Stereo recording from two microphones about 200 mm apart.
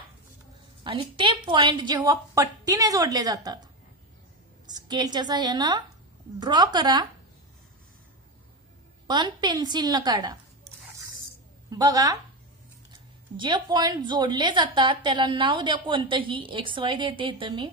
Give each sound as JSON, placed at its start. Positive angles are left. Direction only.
{"t": 0.8, "sound": "a woman's voice", "side_deg": -25}
{"t": 4.6, "sound": "a woman's voice", "side_deg": -20}
{"t": 9.0, "sound": "a woman's voice", "side_deg": -20}
{"t": 11.7, "sound": "a woman's voice", "side_deg": -20}
{"t": 13.4, "sound": "a woman's voice", "side_deg": -20}